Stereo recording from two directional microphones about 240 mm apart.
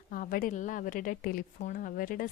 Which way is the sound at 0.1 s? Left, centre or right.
Left.